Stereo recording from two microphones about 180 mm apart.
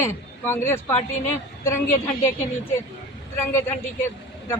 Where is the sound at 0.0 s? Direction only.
15° left (ahead or behind).